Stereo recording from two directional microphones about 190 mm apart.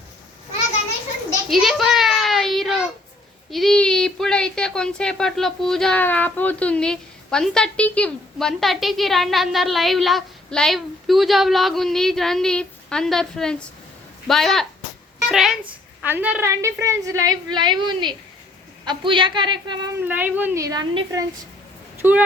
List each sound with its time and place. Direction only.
1.5 s a sound: centre (ahead or behind)
3.5 s a woman's voice: centre (ahead or behind); by 19.9 s 25° right (ahead or behind)
20.0 s a woman's voice: 10° right (ahead or behind)